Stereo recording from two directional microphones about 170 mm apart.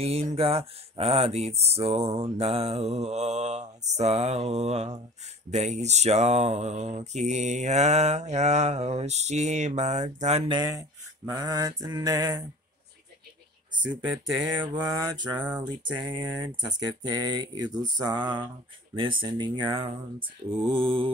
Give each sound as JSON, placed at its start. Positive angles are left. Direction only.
{"t": 0.0, "sound": "mantra", "side_deg": -35}
{"t": 10.5, "sound": "speech", "side_deg": -20}
{"t": 14.3, "sound": "mantra", "side_deg": -5}
{"t": 14.7, "sound": "speech", "side_deg": -25}
{"t": 15.4, "sound": "speech", "side_deg": -10}
{"t": 16.1, "sound": "speech", "side_deg": -25}